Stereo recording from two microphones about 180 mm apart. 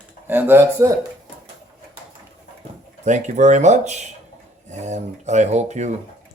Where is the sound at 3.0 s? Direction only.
40° right (ahead or behind).